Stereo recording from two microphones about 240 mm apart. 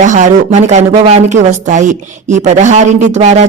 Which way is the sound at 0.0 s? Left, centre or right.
Right.